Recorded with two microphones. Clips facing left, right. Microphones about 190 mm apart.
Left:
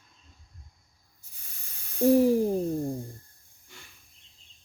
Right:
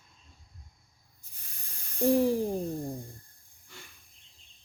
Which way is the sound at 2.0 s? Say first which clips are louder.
Left 4 dB; 10° left (ahead or behind).